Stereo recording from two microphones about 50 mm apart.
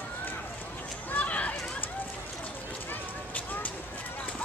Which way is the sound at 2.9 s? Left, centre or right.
Left.